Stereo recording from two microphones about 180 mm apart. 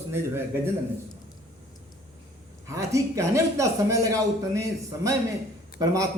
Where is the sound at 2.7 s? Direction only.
15° right (ahead or behind).